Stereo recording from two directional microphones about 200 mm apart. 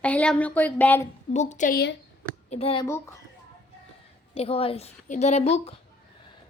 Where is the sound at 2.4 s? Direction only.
30° left (ahead or behind).